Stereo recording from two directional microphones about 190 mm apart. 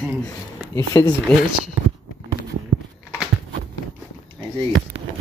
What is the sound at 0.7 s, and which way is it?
Speech, 15° left (ahead or behind).